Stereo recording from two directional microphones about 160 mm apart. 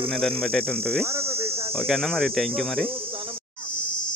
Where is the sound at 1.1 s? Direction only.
15° right (ahead or behind).